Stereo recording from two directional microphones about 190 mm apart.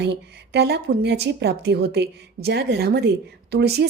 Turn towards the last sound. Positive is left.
turn(degrees=-60)  # may be behind; listen again after turning